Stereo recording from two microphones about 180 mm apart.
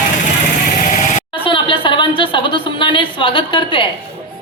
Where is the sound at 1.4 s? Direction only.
30° left (ahead or behind).